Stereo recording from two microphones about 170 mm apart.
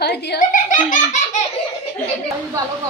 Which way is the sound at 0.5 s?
50° left (ahead or behind).